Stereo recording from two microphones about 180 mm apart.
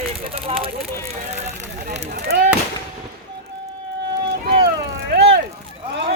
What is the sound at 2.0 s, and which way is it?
Artillery fire, 60° right (ahead or behind).